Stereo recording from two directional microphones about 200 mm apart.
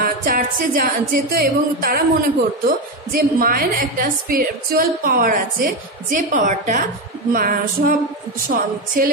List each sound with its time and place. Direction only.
0.2 s a woman's voice: 45° right (ahead or behind)